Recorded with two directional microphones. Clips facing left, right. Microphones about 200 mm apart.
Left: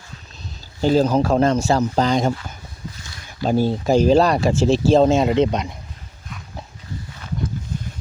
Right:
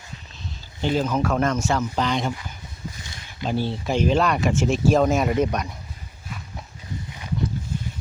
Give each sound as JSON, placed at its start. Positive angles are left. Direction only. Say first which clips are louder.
{"t": 0.8, "sound": "speech", "louder": "left 6 dB", "side_deg": 35}
{"t": 3.4, "sound": "speech", "louder": "left 7 dB", "side_deg": 40}